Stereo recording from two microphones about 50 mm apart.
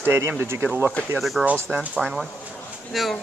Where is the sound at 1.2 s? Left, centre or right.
Centre.